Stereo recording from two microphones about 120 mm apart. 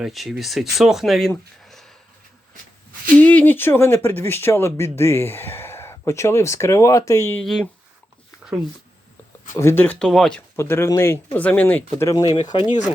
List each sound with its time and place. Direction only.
0.0 s speech: centre (ahead or behind)
1.6 s a sound: centre (ahead or behind)
3.2 s speech: 15° left (ahead or behind)
7.4 s speech: centre (ahead or behind)
9.6 s speech: 20° left (ahead or behind)
10.6 s speech: 20° left (ahead or behind)
12.0 s speech: 35° left (ahead or behind)